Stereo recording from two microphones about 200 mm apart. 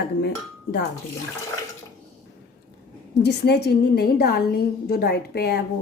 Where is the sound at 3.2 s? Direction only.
55° left (ahead or behind).